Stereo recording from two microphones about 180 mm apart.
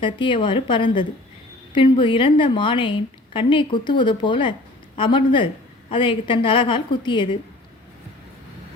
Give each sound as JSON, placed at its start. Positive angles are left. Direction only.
{"t": 0.0, "sound": "a woman's voice", "side_deg": 25}